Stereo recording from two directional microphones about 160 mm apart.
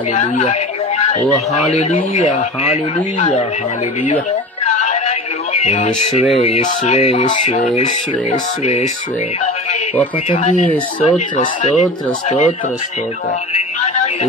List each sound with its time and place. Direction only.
0.1 s a man's voice: 45° left (ahead or behind)
4.6 s a sound: 45° left (ahead or behind)
6.3 s speech: 40° left (ahead or behind)
10.3 s speech: 50° left (ahead or behind)
13.5 s music: 45° left (ahead or behind)